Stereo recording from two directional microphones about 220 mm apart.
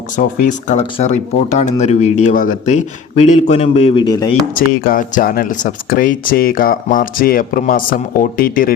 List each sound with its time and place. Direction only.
0.2 s speech: 40° left (ahead or behind); by 4.3 s 15° left (ahead or behind)
4.5 s speech: 40° left (ahead or behind)